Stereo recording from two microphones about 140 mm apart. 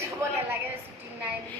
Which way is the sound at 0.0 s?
20° right (ahead or behind).